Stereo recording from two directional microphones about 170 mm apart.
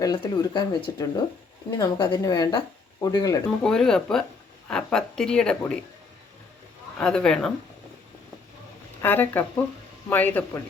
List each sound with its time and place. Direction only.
0.0 s speech: 20° left (ahead or behind)
3.6 s speech: 5° left (ahead or behind)
7.0 s speech: 5° left (ahead or behind)
9.0 s speech: 10° left (ahead or behind)